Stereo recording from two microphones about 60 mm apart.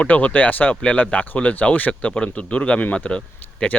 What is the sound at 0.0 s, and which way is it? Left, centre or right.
Speech, left.